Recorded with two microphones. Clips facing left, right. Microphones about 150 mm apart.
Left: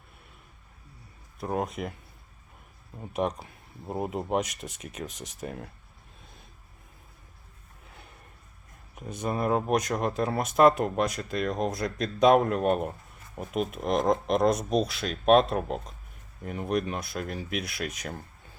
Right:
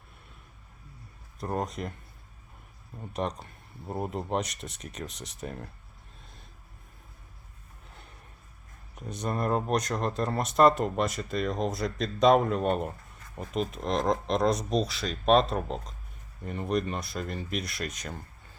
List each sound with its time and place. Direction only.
1.4 s speech: 5° left (ahead or behind)
3.0 s speech: 5° left (ahead or behind)
9.0 s speech: 5° left (ahead or behind)